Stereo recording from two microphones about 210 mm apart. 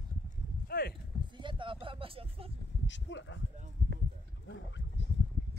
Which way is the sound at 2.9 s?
60° left (ahead or behind).